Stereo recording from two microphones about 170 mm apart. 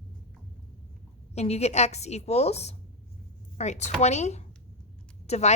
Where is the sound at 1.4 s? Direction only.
40° left (ahead or behind).